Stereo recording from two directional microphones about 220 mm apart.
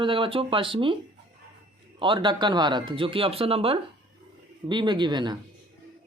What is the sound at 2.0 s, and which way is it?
Speech, 20° right (ahead or behind).